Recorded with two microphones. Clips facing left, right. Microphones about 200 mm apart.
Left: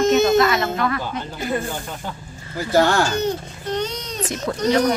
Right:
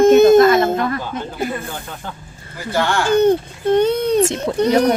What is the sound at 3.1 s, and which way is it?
A child's voice, 55° right (ahead or behind).